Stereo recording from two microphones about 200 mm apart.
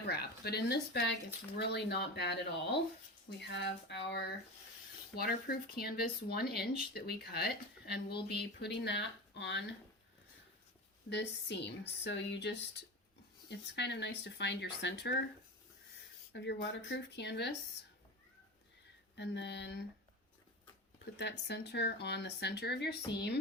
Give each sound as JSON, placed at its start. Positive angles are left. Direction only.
{"t": 0.1, "sound": "speech", "side_deg": 55}
{"t": 11.1, "sound": "speech", "side_deg": 60}
{"t": 16.3, "sound": "speech", "side_deg": 60}
{"t": 19.1, "sound": "speech", "side_deg": 60}
{"t": 21.0, "sound": "speech", "side_deg": 60}